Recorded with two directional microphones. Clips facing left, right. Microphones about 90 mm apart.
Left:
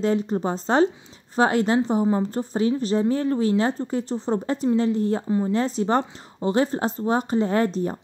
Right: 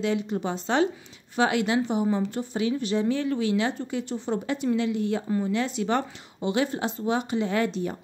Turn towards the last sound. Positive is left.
turn(degrees=35)  # may be behind; listen again after turning